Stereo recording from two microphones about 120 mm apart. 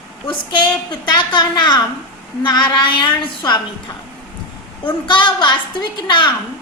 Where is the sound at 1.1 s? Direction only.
40° left (ahead or behind).